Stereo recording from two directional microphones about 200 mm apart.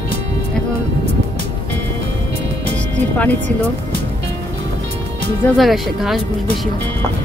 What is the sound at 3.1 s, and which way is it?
Speech, 10° left (ahead or behind).